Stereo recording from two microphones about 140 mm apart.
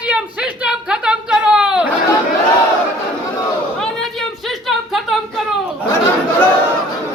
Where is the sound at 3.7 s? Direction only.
5° left (ahead or behind).